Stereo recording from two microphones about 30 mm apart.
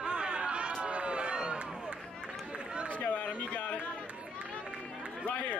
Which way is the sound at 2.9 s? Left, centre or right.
Left.